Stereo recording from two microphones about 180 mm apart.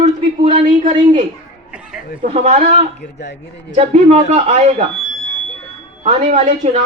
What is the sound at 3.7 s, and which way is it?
A woman's voice, 35° right (ahead or behind).